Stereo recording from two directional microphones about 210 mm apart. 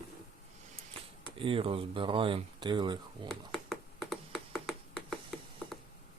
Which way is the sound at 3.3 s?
Centre (ahead or behind).